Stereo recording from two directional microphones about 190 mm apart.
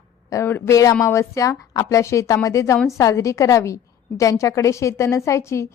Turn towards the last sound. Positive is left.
turn(degrees=15)  # may be behind; listen again after turning